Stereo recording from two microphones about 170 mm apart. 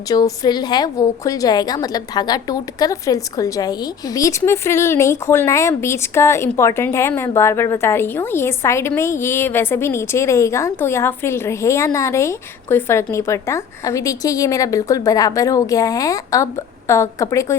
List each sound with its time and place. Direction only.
0.1 s a woman's voice: 25° left (ahead or behind)